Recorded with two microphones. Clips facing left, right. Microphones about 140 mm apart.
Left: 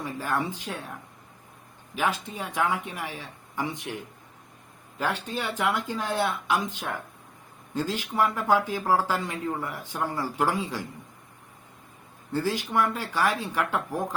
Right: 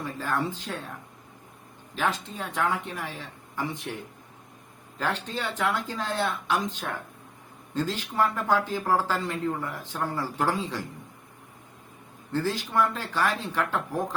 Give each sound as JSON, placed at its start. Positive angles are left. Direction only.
{"t": 0.0, "sound": "speech", "side_deg": 15}
{"t": 2.0, "sound": "speech", "side_deg": 10}
{"t": 4.9, "sound": "speech", "side_deg": 10}
{"t": 12.3, "sound": "speech", "side_deg": 10}